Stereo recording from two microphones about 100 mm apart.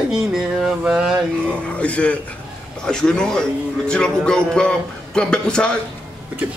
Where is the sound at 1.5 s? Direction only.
10° left (ahead or behind).